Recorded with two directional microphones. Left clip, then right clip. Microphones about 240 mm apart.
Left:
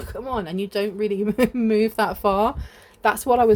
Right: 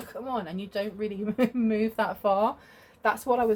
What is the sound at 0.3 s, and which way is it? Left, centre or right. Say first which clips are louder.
Speech: left 6 dB; left.